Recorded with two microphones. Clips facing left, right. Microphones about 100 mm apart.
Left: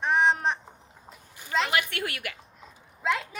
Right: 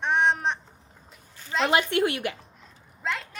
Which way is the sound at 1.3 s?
15° left (ahead or behind).